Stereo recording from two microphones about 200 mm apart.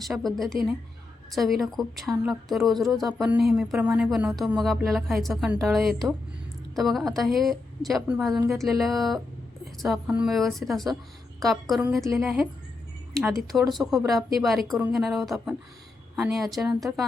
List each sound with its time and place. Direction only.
0.0 s speech: centre (ahead or behind)
11.3 s a woman's voice: 15° right (ahead or behind)
11.7 s a woman's voice: centre (ahead or behind)